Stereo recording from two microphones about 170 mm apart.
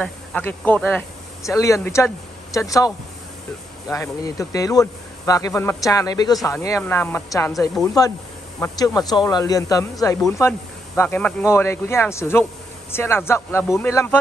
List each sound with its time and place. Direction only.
0.0 s speech: 10° left (ahead or behind)
3.9 s a man's voice: 20° left (ahead or behind)